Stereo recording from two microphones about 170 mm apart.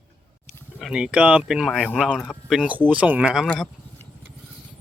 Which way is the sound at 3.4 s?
10° left (ahead or behind).